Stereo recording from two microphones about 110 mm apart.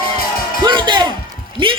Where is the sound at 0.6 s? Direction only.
45° right (ahead or behind).